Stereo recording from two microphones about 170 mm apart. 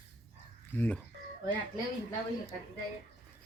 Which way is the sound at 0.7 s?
10° left (ahead or behind).